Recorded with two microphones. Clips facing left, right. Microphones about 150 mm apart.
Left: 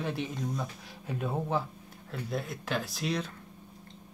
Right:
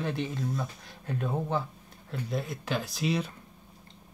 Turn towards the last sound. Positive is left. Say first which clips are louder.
# right 3 dB
turn(degrees=-5)  # may be behind; listen again after turning